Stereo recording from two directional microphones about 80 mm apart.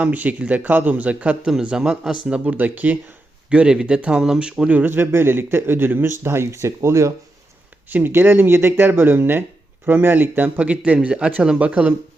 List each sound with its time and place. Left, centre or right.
0.0 s speech: centre
4.8 s speech: right
7.9 s speech: right